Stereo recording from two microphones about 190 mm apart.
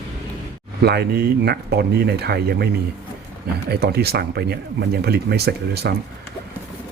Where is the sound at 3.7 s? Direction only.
55° right (ahead or behind).